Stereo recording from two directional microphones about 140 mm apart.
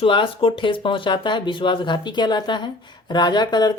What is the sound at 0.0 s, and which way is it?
Speech, 40° left (ahead or behind).